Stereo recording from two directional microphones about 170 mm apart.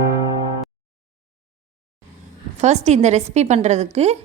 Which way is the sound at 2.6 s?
40° right (ahead or behind).